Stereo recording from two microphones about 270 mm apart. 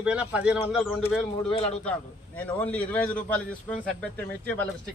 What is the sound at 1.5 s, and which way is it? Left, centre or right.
Speech, left.